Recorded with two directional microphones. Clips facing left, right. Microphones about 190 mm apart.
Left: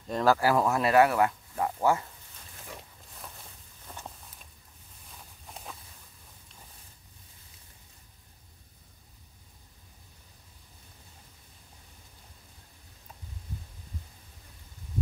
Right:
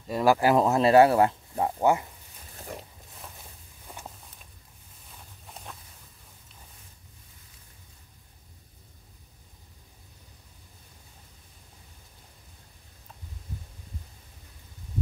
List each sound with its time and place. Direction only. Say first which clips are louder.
0.0 s speech: right 2 dB; 10° right (ahead or behind)
3.8 s walk: right 1 dB; 10° right (ahead or behind)
5.5 s walk: even; centre (ahead or behind)